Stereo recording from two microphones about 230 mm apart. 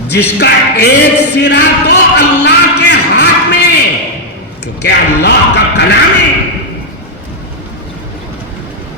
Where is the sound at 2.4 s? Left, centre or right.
Left.